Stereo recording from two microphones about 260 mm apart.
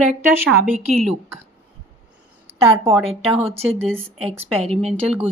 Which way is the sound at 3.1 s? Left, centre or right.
Right.